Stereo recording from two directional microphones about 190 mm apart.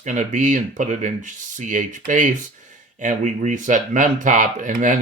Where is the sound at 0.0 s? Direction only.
40° right (ahead or behind).